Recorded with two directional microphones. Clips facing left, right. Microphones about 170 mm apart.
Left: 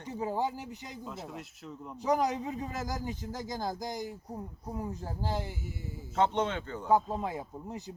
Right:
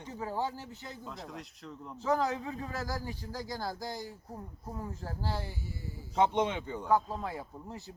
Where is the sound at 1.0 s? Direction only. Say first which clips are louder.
Left 3 dB; 5° left (ahead or behind).